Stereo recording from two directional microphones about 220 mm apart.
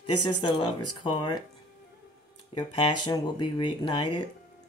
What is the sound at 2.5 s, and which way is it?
Speech, 20° left (ahead or behind).